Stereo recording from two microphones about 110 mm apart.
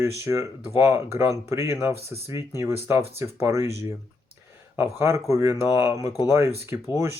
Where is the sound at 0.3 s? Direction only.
25° right (ahead or behind).